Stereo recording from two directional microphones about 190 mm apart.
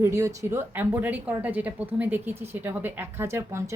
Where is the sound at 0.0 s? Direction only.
15° right (ahead or behind).